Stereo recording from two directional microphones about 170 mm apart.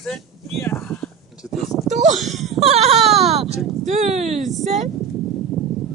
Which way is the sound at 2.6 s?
40° right (ahead or behind).